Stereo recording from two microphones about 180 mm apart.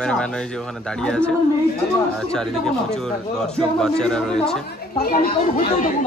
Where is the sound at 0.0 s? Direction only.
5° left (ahead or behind).